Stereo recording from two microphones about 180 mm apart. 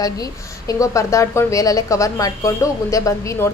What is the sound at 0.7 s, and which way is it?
A woman's voice, 20° left (ahead or behind).